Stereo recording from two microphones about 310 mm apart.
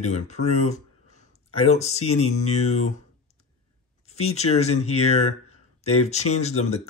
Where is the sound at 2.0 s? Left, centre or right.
Left.